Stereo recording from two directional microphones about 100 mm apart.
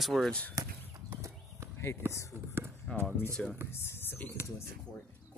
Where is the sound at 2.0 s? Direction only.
20° right (ahead or behind).